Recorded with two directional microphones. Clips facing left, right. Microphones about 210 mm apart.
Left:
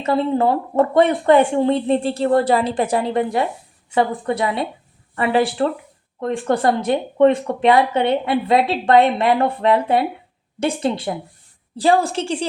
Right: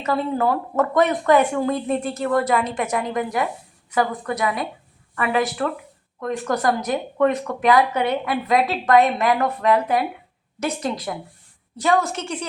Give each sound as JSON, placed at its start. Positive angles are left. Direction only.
{"t": 0.0, "sound": "a woman's voice", "side_deg": 25}